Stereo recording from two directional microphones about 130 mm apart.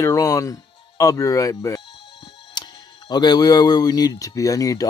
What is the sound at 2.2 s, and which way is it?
Speech, 35° left (ahead or behind).